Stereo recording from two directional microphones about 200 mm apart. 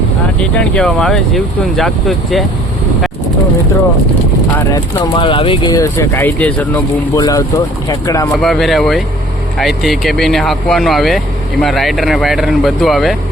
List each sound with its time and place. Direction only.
0.5 s speech: 5° left (ahead or behind)
4.5 s speech: 15° left (ahead or behind)
8.3 s speech: centre (ahead or behind)